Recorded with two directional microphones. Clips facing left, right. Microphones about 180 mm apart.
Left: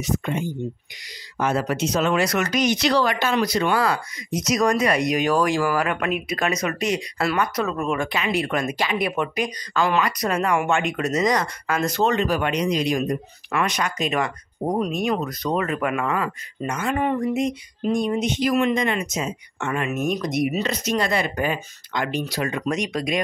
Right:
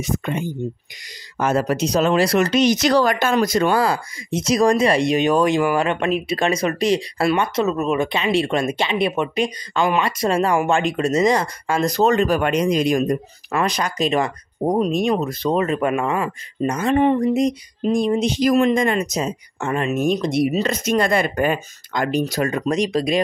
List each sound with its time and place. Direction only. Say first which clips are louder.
0.0 s speech: right 1 dB; 55° right (ahead or behind)
1.4 s speech: right 3 dB; 40° right (ahead or behind)
2.7 s speech: right 4 dB; 45° right (ahead or behind)
13.5 s speech: right 2 dB; 30° right (ahead or behind)
20.6 s speech: right 4 dB; 50° right (ahead or behind); by 23.2 s 30° right (ahead or behind)